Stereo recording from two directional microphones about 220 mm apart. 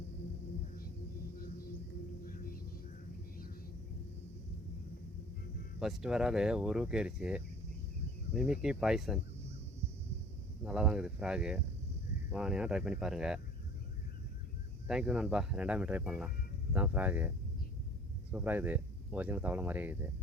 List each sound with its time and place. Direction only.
2.2 s a sound: 40° left (ahead or behind)
5.8 s speech: centre (ahead or behind)
10.6 s speech: 5° right (ahead or behind)
14.8 s speech: 5° right (ahead or behind)